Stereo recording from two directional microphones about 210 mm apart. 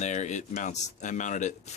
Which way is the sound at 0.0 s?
35° left (ahead or behind).